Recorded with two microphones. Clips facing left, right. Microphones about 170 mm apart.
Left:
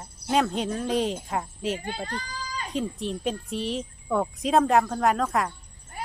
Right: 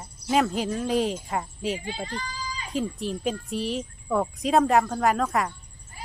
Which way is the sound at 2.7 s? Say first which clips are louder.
Right 1 dB; centre (ahead or behind).